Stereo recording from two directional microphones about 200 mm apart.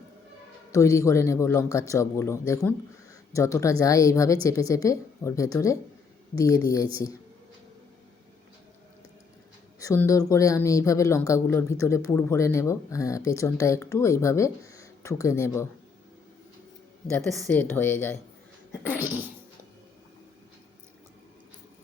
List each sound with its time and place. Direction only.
0.7 s speech: 15° left (ahead or behind)
9.8 s speech: 15° left (ahead or behind)
17.2 s speech: 5° left (ahead or behind)